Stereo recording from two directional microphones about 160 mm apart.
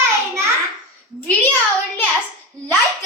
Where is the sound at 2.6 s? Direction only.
15° left (ahead or behind).